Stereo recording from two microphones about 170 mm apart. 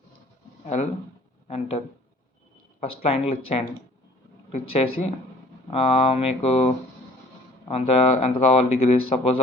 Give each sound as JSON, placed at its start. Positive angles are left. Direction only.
{"t": 0.7, "sound": "speech", "side_deg": 40}
{"t": 2.8, "sound": "speech", "side_deg": 35}